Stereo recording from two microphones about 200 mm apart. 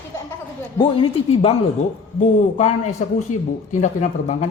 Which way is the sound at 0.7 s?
25° left (ahead or behind).